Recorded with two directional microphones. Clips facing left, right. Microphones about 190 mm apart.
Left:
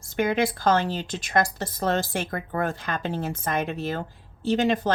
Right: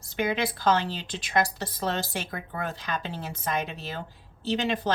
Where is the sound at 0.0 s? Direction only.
50° left (ahead or behind).